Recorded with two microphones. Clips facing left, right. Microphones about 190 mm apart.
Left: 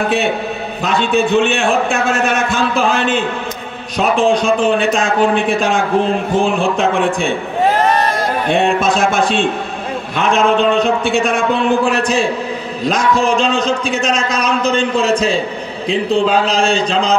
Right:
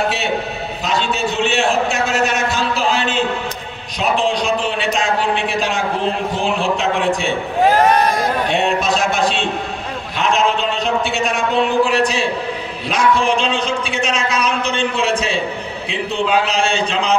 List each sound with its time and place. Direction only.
0.8 s a man's voice: 55° left (ahead or behind)
8.5 s a man's voice: 50° left (ahead or behind)